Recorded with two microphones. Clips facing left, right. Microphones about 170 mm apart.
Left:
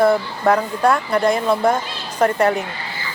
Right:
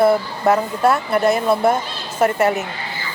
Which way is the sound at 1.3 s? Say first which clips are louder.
Right 1 dB; 5° right (ahead or behind).